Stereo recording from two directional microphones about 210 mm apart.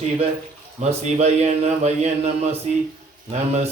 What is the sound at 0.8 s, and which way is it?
Mantra, 30° right (ahead or behind).